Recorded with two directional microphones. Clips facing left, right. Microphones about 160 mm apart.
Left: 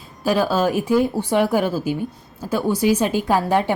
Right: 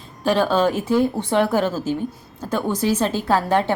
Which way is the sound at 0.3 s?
5° left (ahead or behind).